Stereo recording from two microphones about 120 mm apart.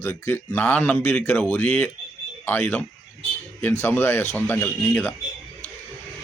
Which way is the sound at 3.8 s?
15° left (ahead or behind).